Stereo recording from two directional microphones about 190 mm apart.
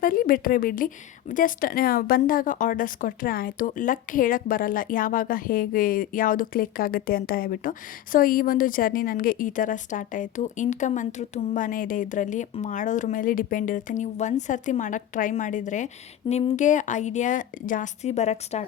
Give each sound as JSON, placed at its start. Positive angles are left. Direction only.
{"t": 0.0, "sound": "a woman's voice", "side_deg": 50}